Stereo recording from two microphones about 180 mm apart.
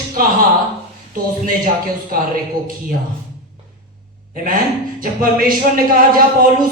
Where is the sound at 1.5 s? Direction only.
50° right (ahead or behind).